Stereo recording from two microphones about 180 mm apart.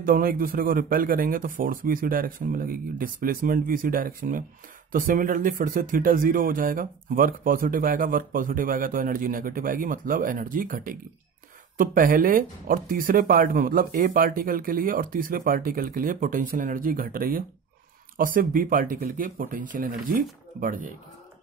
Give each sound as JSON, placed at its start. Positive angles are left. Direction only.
{"t": 0.0, "sound": "speech", "side_deg": -55}